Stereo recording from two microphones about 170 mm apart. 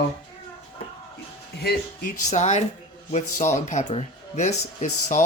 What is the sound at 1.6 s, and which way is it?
Speech, 65° left (ahead or behind).